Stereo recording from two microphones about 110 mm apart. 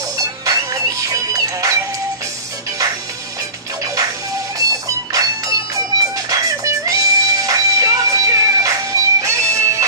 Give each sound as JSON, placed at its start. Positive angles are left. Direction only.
{"t": 0.5, "sound": "music", "side_deg": -30}
{"t": 3.8, "sound": "music", "side_deg": -30}